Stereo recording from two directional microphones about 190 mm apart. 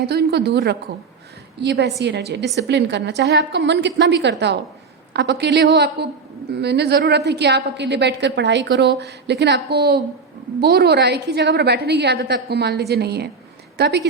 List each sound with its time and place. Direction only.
0.0 s a woman's voice: 60° right (ahead or behind)